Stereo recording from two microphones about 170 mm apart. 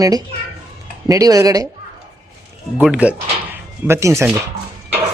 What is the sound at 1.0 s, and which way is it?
Speech, 20° right (ahead or behind).